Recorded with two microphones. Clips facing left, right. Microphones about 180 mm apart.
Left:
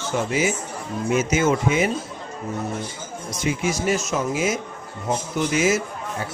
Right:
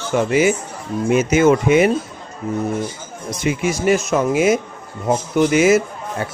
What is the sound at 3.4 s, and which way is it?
Speech, 60° right (ahead or behind).